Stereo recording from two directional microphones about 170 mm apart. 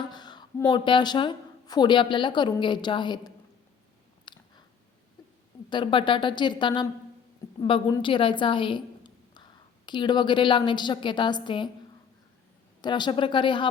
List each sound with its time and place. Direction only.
0.1 s a woman's voice: 25° left (ahead or behind)
4.3 s chewing: 25° left (ahead or behind)
5.7 s a woman's voice: 30° left (ahead or behind)
12.8 s speech: 25° left (ahead or behind)